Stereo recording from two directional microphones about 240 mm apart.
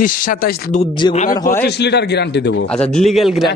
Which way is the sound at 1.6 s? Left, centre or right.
Left.